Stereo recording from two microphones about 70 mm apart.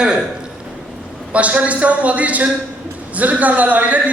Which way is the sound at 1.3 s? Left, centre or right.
Centre.